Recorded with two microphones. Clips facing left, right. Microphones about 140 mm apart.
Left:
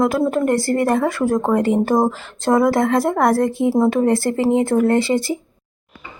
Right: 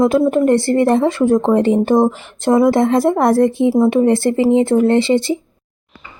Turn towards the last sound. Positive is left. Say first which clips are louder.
# right 3 dB
turn(degrees=-25)  # may be behind; listen again after turning